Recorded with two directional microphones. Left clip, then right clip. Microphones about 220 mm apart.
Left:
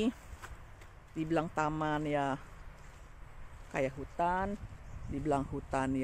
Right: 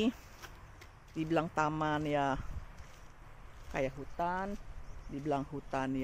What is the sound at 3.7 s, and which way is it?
Speech, 10° left (ahead or behind).